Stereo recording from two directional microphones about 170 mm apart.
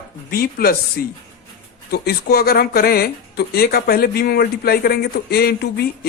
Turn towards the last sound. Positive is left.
turn(degrees=65)  # may be behind; listen again after turning